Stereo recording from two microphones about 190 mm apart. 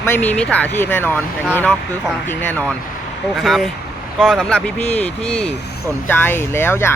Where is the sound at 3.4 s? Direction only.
Centre (ahead or behind).